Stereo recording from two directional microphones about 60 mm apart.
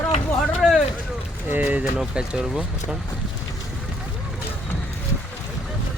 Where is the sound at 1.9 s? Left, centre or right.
Centre.